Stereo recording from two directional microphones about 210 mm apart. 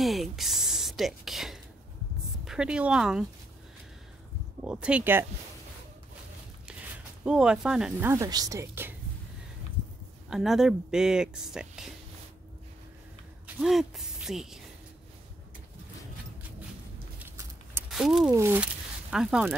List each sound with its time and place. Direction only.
0.0 s speech: centre (ahead or behind)
4.6 s speech: 5° right (ahead or behind)
7.2 s speech: 5° right (ahead or behind)
10.3 s speech: centre (ahead or behind)
13.6 s speech: centre (ahead or behind)
17.7 s a sound: centre (ahead or behind)
18.3 s speech: 10° right (ahead or behind)